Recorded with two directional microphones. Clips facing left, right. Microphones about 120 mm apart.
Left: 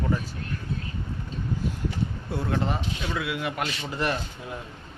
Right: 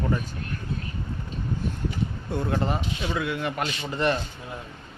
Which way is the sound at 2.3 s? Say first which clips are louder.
Right 2 dB; centre (ahead or behind).